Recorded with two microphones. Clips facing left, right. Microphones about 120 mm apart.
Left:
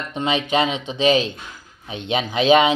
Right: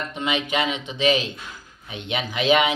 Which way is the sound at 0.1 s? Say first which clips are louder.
Left 6 dB; 30° left (ahead or behind).